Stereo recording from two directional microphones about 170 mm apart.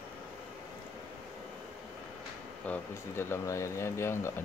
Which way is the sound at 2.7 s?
15° left (ahead or behind).